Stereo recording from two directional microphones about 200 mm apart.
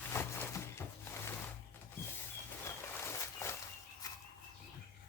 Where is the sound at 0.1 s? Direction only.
10° left (ahead or behind).